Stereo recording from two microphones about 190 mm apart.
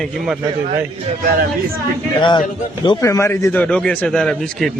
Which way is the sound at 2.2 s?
25° left (ahead or behind).